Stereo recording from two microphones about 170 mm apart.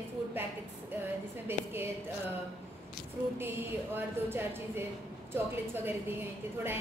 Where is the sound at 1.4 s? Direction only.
15° right (ahead or behind).